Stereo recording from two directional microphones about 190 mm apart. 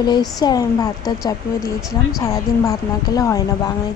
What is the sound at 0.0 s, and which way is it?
A woman's voice, 20° left (ahead or behind).